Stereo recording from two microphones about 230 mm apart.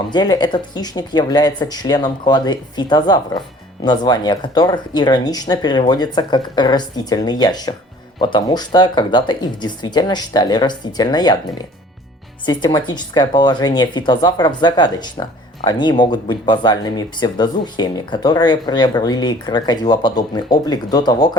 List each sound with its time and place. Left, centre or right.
0.1 s speech: centre